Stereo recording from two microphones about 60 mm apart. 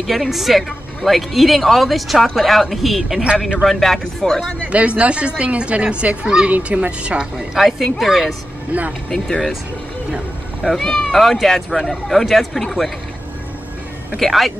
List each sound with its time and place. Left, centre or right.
0.0 s speech: centre
4.6 s speech: right
7.5 s speech: centre
10.6 s speech: centre
14.1 s speech: centre